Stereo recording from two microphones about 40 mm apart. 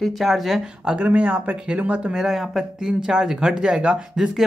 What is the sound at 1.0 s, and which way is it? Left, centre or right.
Speech, right.